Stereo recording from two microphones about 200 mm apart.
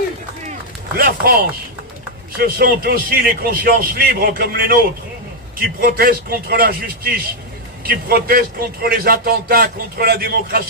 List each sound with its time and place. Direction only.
0.5 s chop: 45° right (ahead or behind)
2.3 s a man's voice: 50° right (ahead or behind)